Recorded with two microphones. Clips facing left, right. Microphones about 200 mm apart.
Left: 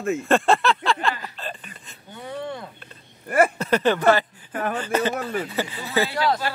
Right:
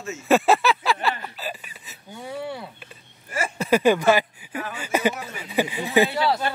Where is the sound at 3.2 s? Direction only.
60° left (ahead or behind).